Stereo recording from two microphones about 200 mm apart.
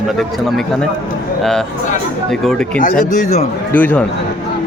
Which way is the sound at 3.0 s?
35° left (ahead or behind).